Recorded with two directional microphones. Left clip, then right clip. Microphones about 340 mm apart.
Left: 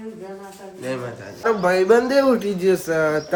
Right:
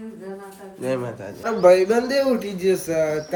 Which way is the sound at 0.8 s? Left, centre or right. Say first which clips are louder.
Right 3 dB; centre.